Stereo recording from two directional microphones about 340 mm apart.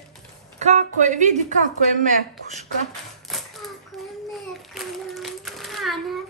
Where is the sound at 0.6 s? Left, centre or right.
Centre.